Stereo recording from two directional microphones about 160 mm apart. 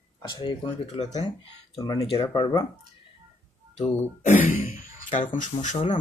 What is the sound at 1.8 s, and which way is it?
Speech, 25° left (ahead or behind).